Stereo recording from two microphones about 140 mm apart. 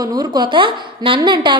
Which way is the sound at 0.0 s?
30° right (ahead or behind).